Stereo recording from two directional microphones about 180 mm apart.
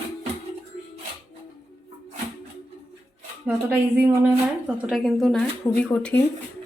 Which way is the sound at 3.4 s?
10° right (ahead or behind).